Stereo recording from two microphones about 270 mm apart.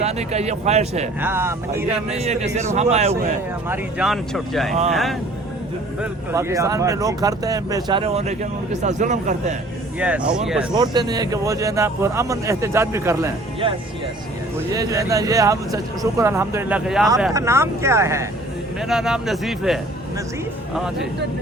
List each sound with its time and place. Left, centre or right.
0.0 s a man's voice: right
1.2 s speech: centre
2.0 s a man's voice: right
3.7 s speech: centre
6.0 s speech: centre; by 9.5 s right
10.0 s speech: centre
10.8 s speech: centre